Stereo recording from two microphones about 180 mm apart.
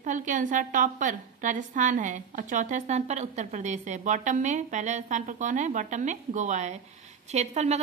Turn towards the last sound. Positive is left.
turn(degrees=-35)  # may be behind; listen again after turning